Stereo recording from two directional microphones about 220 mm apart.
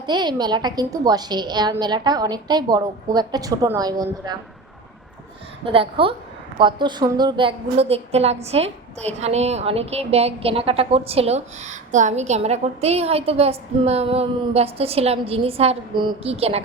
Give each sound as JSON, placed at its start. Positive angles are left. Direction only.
{"t": 0.0, "sound": "a woman's voice", "side_deg": -20}
{"t": 5.6, "sound": "a woman's voice", "side_deg": -25}